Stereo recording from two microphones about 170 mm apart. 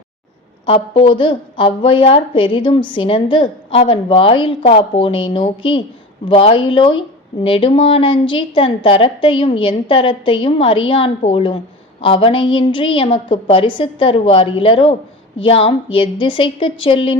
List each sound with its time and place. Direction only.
0.6 s a woman's voice: 30° left (ahead or behind)